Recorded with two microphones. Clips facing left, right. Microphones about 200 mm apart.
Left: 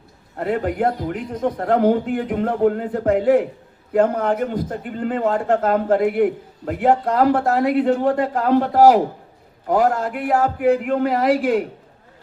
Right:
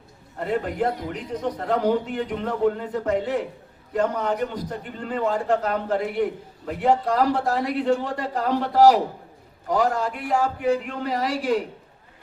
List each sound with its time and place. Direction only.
0.3 s a man's voice: 55° left (ahead or behind)